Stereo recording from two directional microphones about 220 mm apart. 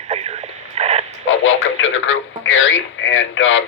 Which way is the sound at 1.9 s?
60° left (ahead or behind).